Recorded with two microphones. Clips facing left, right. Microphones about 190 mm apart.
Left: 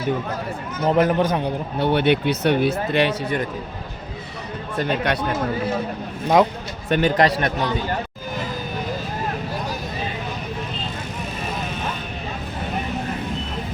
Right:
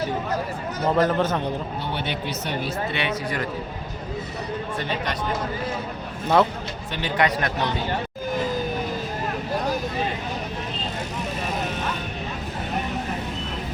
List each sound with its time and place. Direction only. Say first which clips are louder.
0.9 s a man's voice: left 3 dB; 15° left (ahead or behind)
1.8 s speech: left 10 dB; 60° left (ahead or behind)
2.9 s speech: left 8 dB; 35° left (ahead or behind)
4.8 s speech: left 9 dB; 50° left (ahead or behind)
6.2 s a man's voice: left 3 dB; 15° left (ahead or behind)
6.9 s speech: left 6 dB; 50° left (ahead or behind)
7.3 s a man's voice: left 4 dB; 30° left (ahead or behind)